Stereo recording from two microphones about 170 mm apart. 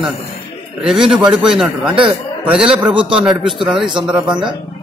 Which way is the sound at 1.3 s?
5° right (ahead or behind).